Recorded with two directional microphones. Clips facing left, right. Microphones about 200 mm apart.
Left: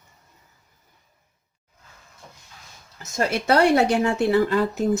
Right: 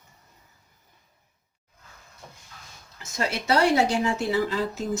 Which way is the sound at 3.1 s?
55° left (ahead or behind).